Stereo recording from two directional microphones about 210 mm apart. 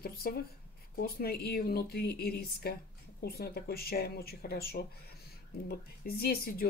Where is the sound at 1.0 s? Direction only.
45° left (ahead or behind).